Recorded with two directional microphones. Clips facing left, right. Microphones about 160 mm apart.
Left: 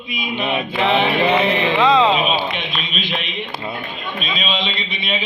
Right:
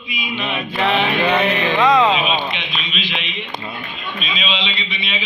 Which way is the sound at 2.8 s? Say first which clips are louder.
Left 2 dB; 50° left (ahead or behind).